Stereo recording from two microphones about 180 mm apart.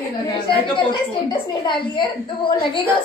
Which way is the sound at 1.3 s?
25° left (ahead or behind).